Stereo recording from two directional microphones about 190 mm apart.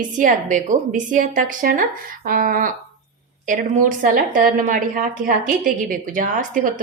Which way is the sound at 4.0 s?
45° right (ahead or behind).